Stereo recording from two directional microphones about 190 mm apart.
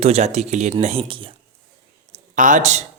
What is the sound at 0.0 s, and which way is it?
Speech, 35° right (ahead or behind).